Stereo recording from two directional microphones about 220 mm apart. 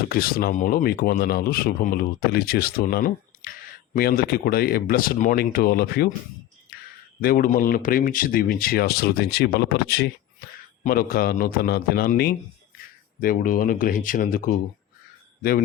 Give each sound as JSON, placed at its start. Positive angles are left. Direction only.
{"t": 0.1, "sound": "speech", "side_deg": 40}
{"t": 7.2, "sound": "speech", "side_deg": 45}